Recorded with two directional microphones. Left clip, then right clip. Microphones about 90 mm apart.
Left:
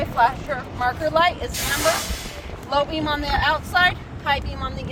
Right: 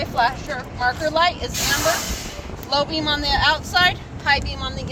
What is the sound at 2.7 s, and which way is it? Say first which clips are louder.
Speech: right 1 dB; 75° left (ahead or behind).